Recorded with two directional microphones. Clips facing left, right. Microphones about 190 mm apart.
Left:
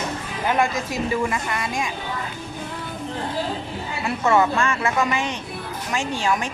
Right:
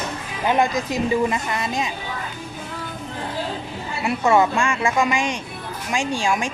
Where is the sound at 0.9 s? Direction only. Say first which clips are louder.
Right 3 dB; 25° right (ahead or behind).